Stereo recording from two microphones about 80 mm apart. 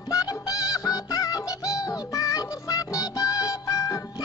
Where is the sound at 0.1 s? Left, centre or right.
Left.